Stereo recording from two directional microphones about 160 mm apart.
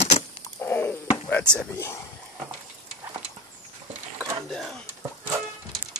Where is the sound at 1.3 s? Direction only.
5° left (ahead or behind).